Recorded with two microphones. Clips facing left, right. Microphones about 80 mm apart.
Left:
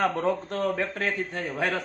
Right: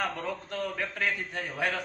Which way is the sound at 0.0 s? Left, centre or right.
Left.